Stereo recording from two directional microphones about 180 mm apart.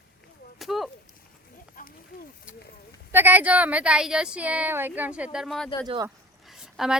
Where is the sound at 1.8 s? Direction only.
50° left (ahead or behind).